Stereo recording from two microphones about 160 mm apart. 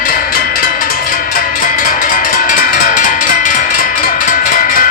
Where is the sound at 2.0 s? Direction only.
55° left (ahead or behind).